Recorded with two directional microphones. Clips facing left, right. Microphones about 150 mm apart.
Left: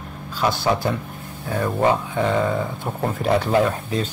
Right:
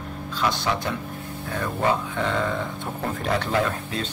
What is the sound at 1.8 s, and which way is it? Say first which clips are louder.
Speech: left 4 dB; 15° left (ahead or behind).